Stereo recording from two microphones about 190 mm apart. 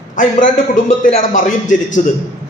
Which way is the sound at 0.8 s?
40° left (ahead or behind).